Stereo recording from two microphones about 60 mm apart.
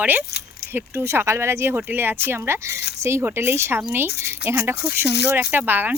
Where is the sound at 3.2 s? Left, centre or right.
Right.